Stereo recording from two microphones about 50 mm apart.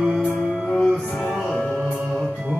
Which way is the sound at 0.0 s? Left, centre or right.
Right.